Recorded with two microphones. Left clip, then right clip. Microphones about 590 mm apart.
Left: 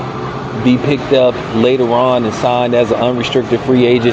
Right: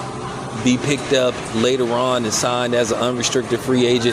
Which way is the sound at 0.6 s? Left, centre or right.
Right.